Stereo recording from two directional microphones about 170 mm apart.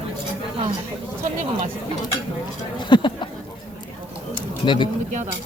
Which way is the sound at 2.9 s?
30° left (ahead or behind).